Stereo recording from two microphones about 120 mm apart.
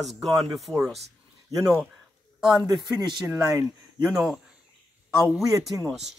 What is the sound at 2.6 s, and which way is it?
Speech, 40° right (ahead or behind).